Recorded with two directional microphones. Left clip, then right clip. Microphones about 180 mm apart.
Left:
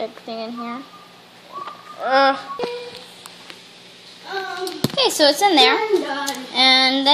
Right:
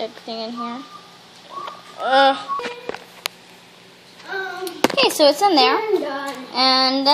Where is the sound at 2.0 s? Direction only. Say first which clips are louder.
Right 1 dB; centre (ahead or behind).